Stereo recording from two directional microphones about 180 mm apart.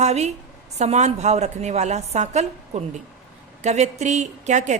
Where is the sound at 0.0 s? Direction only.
40° right (ahead or behind).